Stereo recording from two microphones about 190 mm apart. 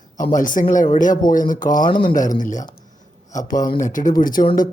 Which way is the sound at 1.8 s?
25° left (ahead or behind).